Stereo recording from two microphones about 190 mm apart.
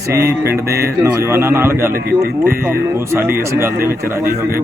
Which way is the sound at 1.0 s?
15° right (ahead or behind).